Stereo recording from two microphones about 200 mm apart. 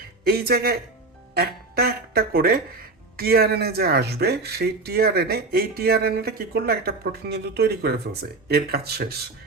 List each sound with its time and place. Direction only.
0.3 s speech: 50° right (ahead or behind)